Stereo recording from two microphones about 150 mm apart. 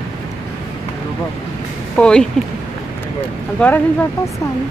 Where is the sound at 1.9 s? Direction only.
5° left (ahead or behind).